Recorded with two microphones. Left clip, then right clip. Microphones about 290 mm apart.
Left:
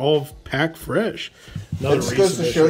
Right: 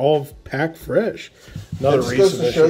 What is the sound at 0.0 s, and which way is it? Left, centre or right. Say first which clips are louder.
Speech: right 2 dB; centre.